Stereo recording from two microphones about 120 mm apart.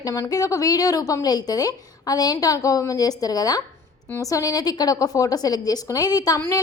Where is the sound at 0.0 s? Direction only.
30° left (ahead or behind).